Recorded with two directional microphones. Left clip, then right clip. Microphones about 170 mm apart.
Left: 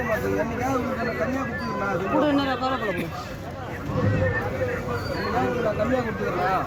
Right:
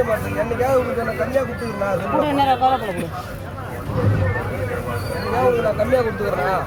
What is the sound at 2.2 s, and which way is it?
Speech, 25° right (ahead or behind).